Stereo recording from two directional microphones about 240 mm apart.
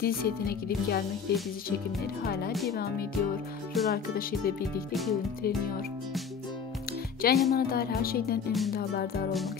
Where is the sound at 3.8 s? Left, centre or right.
Left.